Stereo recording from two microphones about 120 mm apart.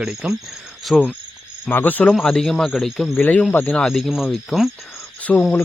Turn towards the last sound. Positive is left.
turn(degrees=5)  # may be behind; listen again after turning